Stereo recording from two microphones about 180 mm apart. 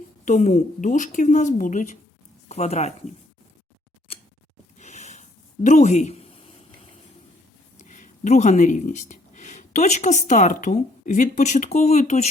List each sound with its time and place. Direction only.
0.3 s a woman's voice: 40° left (ahead or behind)
4.8 s a sound: 40° left (ahead or behind)
7.8 s speech: 40° left (ahead or behind)